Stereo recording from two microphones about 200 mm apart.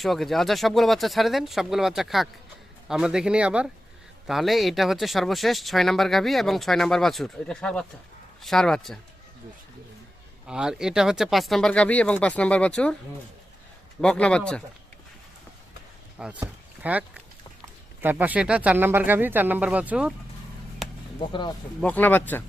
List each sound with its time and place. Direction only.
0.0 s speech: centre (ahead or behind)
10.4 s speech: 5° right (ahead or behind)
14.0 s speech: 5° left (ahead or behind)
16.1 s speech: 5° right (ahead or behind)
20.8 s a sound: centre (ahead or behind)
21.2 s speech: 25° left (ahead or behind)
21.8 s speech: 5° left (ahead or behind)